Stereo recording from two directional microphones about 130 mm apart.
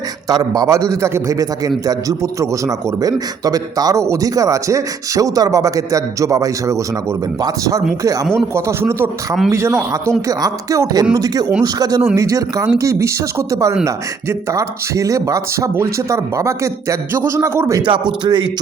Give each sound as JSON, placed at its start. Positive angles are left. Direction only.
{"t": 0.3, "sound": "a man's voice", "side_deg": -30}
{"t": 17.8, "sound": "speech", "side_deg": -35}